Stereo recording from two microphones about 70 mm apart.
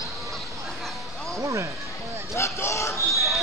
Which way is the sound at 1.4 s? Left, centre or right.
Right.